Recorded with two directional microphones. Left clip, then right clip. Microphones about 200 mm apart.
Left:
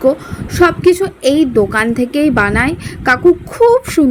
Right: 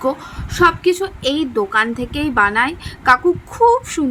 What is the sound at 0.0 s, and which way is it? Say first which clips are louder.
A woman's voice: left 7 dB; 15° left (ahead or behind).